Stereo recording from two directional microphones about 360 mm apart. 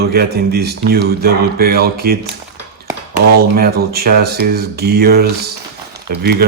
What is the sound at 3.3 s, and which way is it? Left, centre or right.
Speech, right.